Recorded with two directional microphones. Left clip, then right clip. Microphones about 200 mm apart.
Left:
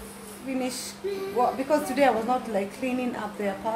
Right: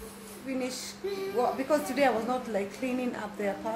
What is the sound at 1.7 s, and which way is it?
A woman's voice, centre (ahead or behind).